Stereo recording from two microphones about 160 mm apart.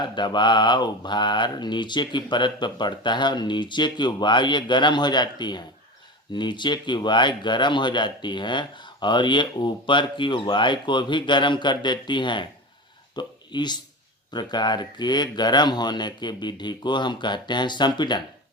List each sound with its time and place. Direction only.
0.0 s speech: 30° left (ahead or behind)
13.1 s a sound: 25° left (ahead or behind)
14.3 s speech: 25° left (ahead or behind)